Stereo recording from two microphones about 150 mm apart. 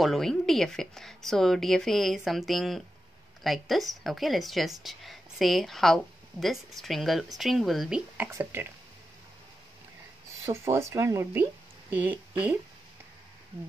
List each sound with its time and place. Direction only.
0.0 s speech: centre (ahead or behind)
8.3 s speech: 15° right (ahead or behind)
10.4 s speech: 20° right (ahead or behind)